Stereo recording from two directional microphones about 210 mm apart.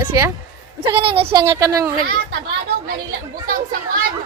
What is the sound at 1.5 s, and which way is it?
Speech, 15° right (ahead or behind).